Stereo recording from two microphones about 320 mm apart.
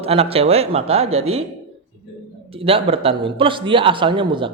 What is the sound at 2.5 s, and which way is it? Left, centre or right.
A man's voice, centre.